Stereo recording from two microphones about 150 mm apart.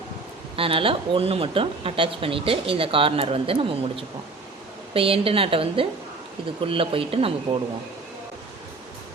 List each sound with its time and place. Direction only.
0.5 s speech: 35° right (ahead or behind)